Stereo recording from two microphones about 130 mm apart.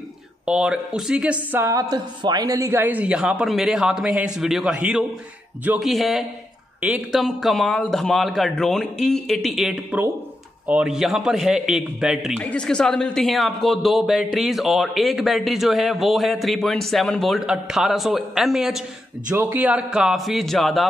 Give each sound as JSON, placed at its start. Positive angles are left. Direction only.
{"t": 0.5, "sound": "speech", "side_deg": -5}
{"t": 12.4, "sound": "speech", "side_deg": 10}